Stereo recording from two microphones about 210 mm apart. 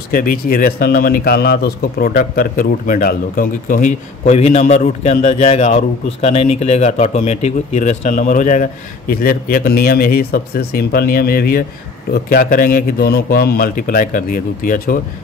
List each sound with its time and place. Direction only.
0.1 s a man's voice: 45° left (ahead or behind)